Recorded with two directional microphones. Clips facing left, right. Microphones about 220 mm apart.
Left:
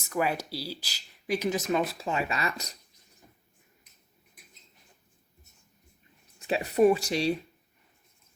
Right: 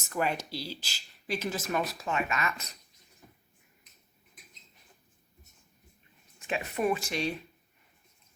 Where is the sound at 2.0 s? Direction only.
30° left (ahead or behind).